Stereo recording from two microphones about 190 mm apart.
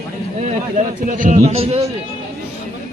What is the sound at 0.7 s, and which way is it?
A man's voice, 45° right (ahead or behind).